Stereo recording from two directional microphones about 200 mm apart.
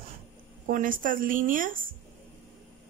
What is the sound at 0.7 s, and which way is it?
Speech, 45° right (ahead or behind).